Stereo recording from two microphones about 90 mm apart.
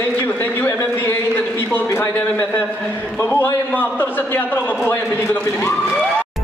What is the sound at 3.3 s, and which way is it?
A man's voice, 20° left (ahead or behind).